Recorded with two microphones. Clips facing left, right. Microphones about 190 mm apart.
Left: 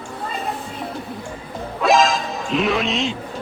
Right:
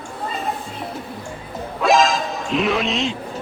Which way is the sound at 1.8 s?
Centre (ahead or behind).